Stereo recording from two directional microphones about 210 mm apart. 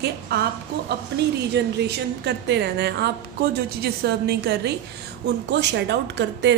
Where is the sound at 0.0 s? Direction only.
50° right (ahead or behind).